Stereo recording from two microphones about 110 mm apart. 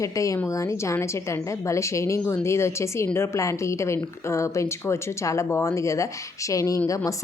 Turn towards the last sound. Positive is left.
turn(degrees=30)  # may be behind; listen again after turning